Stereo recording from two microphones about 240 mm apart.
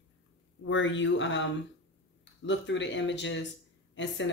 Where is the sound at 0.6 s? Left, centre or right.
Left.